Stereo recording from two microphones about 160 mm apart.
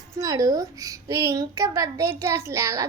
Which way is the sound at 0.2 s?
20° right (ahead or behind).